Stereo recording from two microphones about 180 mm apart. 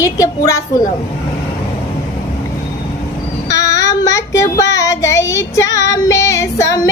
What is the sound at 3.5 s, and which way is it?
Child singing, 15° left (ahead or behind).